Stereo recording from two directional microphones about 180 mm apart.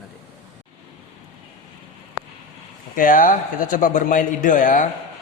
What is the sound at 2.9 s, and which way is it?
Speech, 50° left (ahead or behind).